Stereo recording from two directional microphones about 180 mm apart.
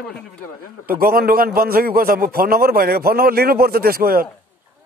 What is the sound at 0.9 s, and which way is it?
A man's voice, 55° right (ahead or behind).